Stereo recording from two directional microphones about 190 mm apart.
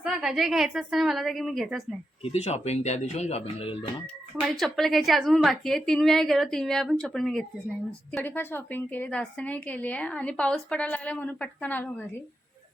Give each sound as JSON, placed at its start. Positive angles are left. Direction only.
{"t": 0.0, "sound": "a woman's voice", "side_deg": 0}
{"t": 2.2, "sound": "speech", "side_deg": 35}
{"t": 4.4, "sound": "a woman's voice", "side_deg": 0}